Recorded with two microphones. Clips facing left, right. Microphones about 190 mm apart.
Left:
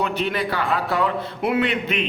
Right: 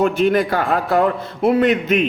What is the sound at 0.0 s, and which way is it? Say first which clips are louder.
A man's voice: right 8 dB; 45° right (ahead or behind).